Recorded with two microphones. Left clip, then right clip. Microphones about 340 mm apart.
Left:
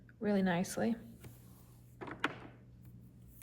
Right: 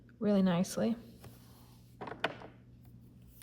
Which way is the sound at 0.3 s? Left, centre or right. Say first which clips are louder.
Right 2 dB; centre.